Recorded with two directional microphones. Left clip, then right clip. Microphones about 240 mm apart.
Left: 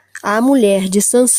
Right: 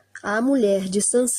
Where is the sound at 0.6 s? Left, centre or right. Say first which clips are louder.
Left 5 dB; left.